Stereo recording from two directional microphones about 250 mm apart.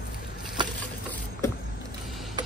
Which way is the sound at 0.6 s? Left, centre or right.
Centre.